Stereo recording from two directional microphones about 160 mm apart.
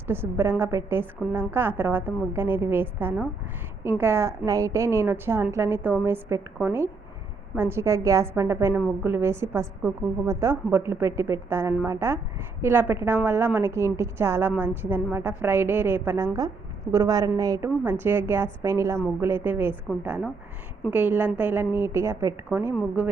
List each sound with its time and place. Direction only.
0.1 s a woman's voice: 15° right (ahead or behind)